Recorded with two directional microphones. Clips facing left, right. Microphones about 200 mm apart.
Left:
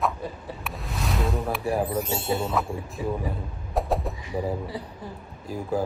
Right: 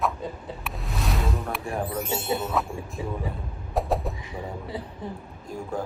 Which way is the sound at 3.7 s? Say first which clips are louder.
Even; centre (ahead or behind).